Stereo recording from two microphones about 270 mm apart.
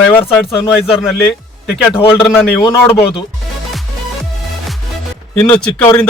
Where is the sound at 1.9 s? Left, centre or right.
Centre.